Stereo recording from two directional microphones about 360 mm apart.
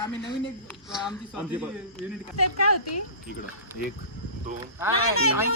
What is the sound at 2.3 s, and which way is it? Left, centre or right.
Speech, left.